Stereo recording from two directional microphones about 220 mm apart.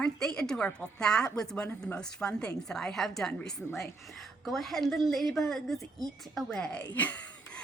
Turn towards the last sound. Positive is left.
turn(degrees=5)  # may be behind; listen again after turning